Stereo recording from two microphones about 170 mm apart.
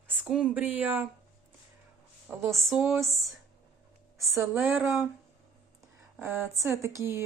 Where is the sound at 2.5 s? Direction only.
Centre (ahead or behind).